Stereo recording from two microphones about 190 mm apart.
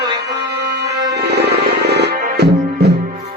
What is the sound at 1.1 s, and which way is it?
Music, 60° right (ahead or behind).